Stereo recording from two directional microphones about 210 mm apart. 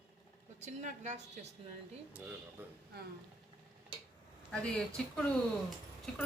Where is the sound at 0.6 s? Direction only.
35° right (ahead or behind).